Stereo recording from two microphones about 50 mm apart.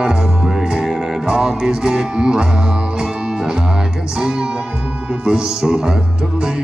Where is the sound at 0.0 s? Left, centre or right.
Centre.